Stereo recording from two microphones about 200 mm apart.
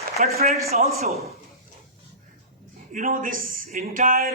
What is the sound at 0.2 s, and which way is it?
A man's voice, 30° right (ahead or behind).